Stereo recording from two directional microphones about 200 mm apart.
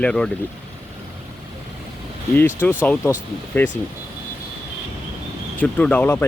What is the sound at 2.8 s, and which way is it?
Speech, 10° left (ahead or behind).